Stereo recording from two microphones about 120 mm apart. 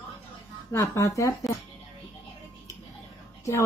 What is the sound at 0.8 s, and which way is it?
Speech, 25° left (ahead or behind).